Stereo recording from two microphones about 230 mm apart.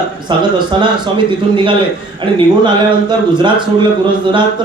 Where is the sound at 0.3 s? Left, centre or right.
Centre.